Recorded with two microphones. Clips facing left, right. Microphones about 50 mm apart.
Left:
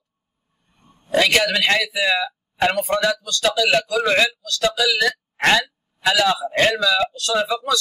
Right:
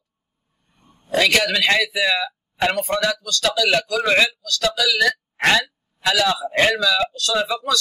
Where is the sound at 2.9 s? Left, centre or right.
Centre.